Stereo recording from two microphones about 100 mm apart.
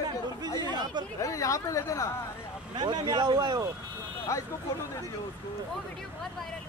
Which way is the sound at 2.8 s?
45° right (ahead or behind).